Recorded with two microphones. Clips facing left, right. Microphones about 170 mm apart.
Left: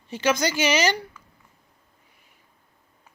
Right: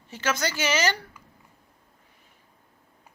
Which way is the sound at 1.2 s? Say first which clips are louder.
Even; 15° right (ahead or behind).